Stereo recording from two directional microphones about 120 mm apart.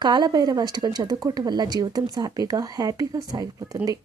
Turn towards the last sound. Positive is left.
turn(degrees=-30)  # may be behind; listen again after turning